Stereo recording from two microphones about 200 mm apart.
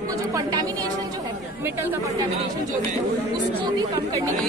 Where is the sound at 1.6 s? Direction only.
10° right (ahead or behind).